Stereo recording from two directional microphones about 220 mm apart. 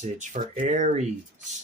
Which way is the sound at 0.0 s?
30° right (ahead or behind).